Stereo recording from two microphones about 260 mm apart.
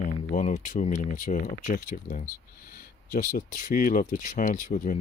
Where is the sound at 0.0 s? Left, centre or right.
Left.